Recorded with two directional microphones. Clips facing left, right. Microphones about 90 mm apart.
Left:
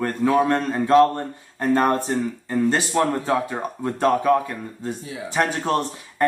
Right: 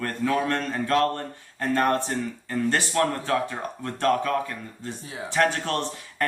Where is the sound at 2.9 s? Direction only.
20° left (ahead or behind).